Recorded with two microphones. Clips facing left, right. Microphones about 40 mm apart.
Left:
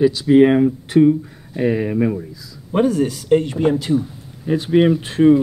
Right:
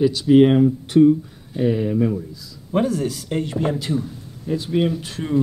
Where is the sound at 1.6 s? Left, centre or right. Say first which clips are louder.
Left 1 dB; left.